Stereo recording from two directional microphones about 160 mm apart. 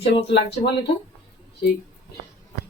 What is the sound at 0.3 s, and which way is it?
Speech, 90° left.